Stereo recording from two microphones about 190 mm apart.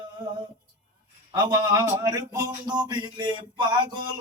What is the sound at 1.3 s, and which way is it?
Speech, 20° right (ahead or behind).